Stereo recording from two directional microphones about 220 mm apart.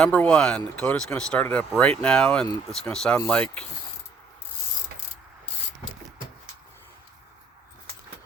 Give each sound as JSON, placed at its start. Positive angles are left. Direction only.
{"t": 0.0, "sound": "speech", "side_deg": 5}